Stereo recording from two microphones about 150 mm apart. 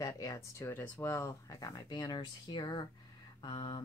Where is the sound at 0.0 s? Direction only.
25° left (ahead or behind).